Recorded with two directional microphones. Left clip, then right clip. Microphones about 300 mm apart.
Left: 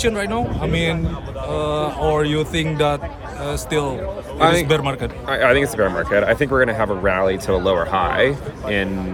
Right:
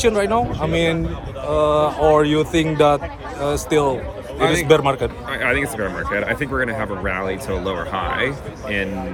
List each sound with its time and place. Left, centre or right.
0.0 s speech: centre
4.4 s a man's voice: centre
4.7 s speech: centre
5.3 s speech: centre